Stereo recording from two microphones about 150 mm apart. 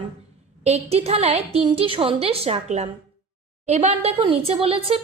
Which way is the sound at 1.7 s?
35° right (ahead or behind).